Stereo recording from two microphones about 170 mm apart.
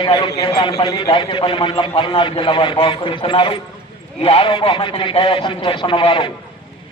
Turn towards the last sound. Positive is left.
turn(degrees=30)  # may be behind; listen again after turning